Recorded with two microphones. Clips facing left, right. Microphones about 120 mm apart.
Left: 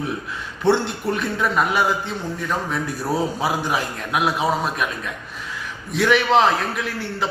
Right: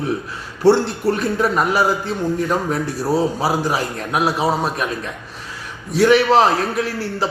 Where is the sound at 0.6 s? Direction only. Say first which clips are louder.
Right 5 dB; 35° right (ahead or behind).